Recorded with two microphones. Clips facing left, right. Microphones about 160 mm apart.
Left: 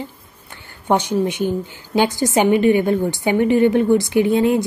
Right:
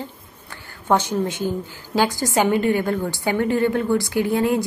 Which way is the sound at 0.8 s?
20° left (ahead or behind).